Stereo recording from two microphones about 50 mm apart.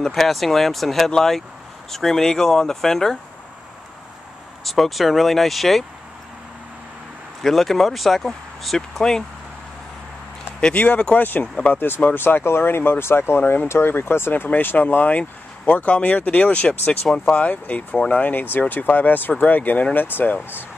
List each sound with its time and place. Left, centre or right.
0.0 s speech: centre
4.6 s speech: centre
7.4 s speech: centre
10.8 s speech: left
11.1 s speech: left
13.4 s speech: left
18.3 s speech: left